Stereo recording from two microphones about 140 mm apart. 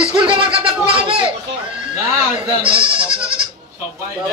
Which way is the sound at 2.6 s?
40° right (ahead or behind).